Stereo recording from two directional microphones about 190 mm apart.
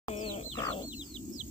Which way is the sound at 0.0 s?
30° left (ahead or behind).